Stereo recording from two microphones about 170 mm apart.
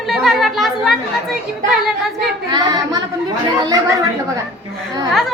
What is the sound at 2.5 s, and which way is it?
Speech, 25° right (ahead or behind).